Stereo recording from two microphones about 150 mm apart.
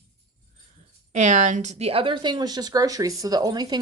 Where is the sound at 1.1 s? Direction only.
55° right (ahead or behind).